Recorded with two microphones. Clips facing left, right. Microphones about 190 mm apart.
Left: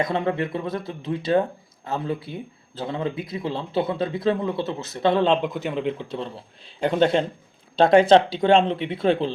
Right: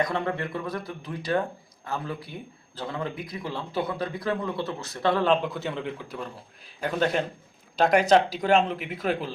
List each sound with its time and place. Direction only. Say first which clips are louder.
0.0 s speech: left 4 dB; 20° left (ahead or behind)